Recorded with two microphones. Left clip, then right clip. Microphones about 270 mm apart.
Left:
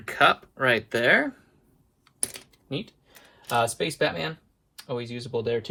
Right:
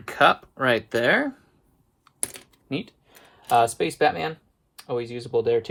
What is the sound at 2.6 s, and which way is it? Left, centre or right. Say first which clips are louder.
Speech: right 3 dB; right.